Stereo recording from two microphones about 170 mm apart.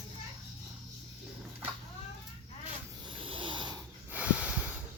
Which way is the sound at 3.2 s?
30° right (ahead or behind).